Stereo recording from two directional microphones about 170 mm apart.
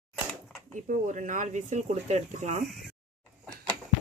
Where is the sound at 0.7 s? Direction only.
45° right (ahead or behind).